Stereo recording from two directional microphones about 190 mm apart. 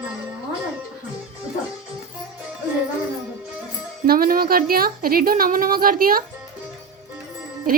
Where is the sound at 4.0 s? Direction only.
50° right (ahead or behind).